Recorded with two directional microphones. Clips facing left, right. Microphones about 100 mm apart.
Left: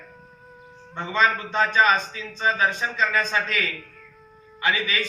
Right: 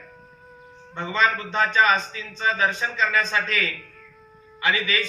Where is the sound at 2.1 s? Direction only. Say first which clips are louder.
Left 1 dB; 25° left (ahead or behind).